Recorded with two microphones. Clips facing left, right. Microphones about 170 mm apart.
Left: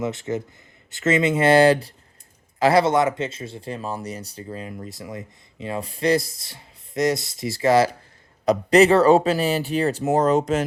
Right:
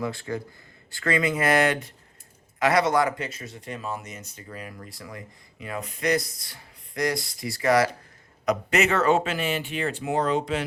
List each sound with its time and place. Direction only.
0.0 s speech: 20° left (ahead or behind); by 10.6 s 45° left (ahead or behind)